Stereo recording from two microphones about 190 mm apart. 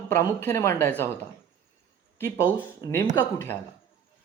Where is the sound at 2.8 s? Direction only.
20° left (ahead or behind).